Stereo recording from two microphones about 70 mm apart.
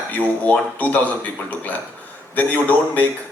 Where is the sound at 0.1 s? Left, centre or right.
Left.